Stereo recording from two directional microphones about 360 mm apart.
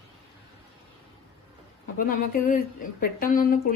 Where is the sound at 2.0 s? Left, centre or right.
Left.